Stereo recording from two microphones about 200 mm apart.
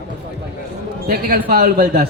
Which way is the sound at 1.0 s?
50° right (ahead or behind).